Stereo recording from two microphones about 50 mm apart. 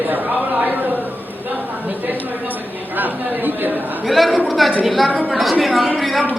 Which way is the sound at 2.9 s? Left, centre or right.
Right.